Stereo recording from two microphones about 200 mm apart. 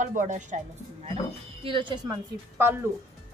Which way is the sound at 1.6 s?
25° right (ahead or behind).